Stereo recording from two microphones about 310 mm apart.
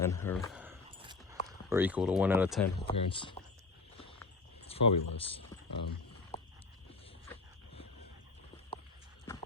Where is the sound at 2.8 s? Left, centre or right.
Centre.